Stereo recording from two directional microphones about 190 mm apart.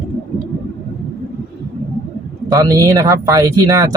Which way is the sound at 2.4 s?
20° right (ahead or behind).